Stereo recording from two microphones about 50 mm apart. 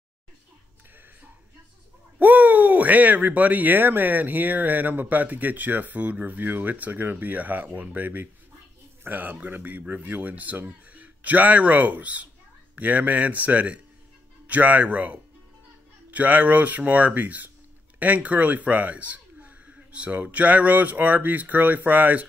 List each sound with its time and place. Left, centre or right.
2.1 s speech: right